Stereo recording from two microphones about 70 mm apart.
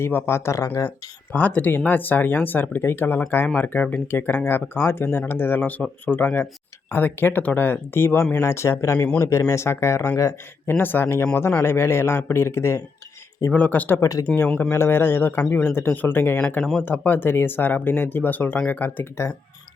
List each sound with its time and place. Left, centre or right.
0.0 s speech: left
0.9 s speech: left
10.7 s speech: left
13.5 s speech: left
14.0 s speech: left
14.6 s speech: left
16.6 s speech: centre
16.8 s speech: left
19.2 s speech: left